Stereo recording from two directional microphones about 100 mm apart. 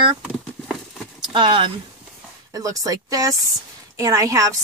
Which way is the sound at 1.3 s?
55° right (ahead or behind).